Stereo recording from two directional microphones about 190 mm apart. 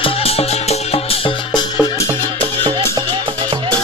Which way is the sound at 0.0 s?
30° left (ahead or behind).